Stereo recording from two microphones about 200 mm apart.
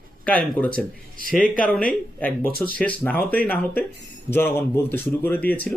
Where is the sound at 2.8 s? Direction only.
10° left (ahead or behind).